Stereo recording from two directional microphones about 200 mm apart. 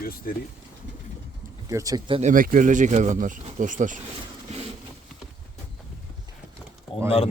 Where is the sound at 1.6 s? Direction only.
15° right (ahead or behind).